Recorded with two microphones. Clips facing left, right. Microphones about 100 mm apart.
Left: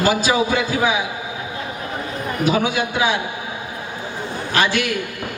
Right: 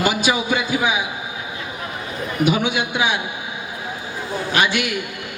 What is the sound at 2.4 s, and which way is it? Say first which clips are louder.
Speech: even; 35° left (ahead or behind).